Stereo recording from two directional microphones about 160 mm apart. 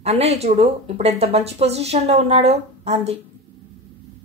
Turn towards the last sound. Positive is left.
turn(degrees=-40)  # may be behind; listen again after turning